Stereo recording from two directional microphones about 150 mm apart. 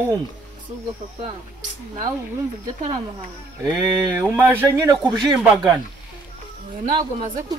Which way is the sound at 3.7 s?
15° right (ahead or behind).